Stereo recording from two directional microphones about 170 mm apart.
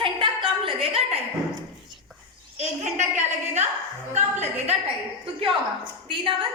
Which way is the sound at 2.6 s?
40° right (ahead or behind).